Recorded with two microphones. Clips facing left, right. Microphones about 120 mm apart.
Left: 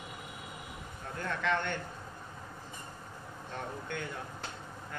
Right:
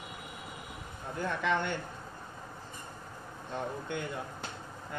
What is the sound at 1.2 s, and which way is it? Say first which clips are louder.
Speech: right 2 dB; 15° right (ahead or behind).